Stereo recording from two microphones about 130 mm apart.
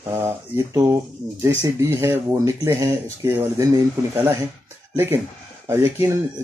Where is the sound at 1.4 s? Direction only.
20° right (ahead or behind).